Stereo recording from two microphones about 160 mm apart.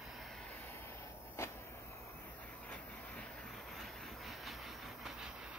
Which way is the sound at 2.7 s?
5° left (ahead or behind).